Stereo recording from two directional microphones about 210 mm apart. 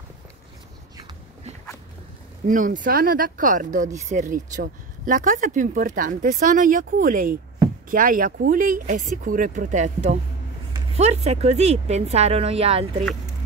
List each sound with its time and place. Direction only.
2.4 s speech: 40° right (ahead or behind)